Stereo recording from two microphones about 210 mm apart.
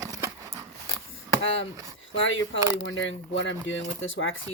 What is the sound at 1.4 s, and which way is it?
Speech, 65° left (ahead or behind).